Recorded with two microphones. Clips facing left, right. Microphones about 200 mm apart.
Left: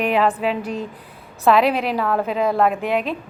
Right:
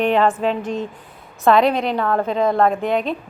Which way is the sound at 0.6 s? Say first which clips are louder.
Right 2 dB; 35° left (ahead or behind).